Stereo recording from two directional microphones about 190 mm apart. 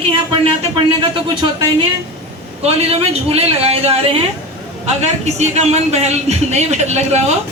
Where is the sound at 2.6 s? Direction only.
30° right (ahead or behind).